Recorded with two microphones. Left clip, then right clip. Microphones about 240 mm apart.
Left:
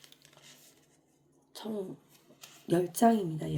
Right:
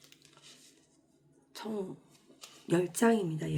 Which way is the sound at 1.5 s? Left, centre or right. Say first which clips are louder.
Even; centre.